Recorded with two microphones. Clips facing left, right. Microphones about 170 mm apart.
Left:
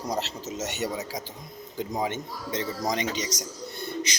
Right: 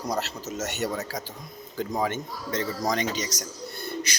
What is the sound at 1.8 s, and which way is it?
A man's voice, 15° left (ahead or behind).